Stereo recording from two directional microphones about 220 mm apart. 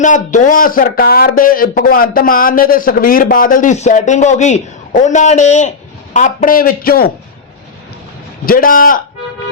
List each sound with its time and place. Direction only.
0.0 s a man's voice: 35° left (ahead or behind)
8.4 s a man's voice: 40° left (ahead or behind)